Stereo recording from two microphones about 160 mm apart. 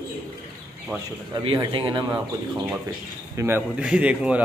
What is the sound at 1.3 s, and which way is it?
Speech, 30° right (ahead or behind).